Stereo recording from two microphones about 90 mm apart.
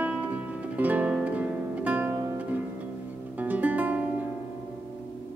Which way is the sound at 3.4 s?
15° right (ahead or behind).